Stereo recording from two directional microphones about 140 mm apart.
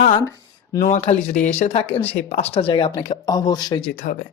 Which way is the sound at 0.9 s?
60° left (ahead or behind).